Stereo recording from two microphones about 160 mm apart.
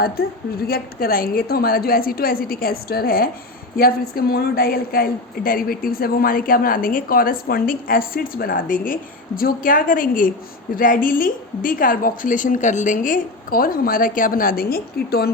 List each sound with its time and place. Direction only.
0.2 s a woman's voice: 70° left (ahead or behind)